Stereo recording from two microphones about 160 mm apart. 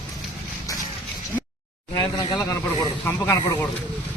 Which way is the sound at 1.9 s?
20° left (ahead or behind).